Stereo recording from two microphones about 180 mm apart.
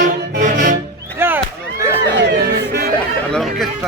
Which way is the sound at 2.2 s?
70° right (ahead or behind).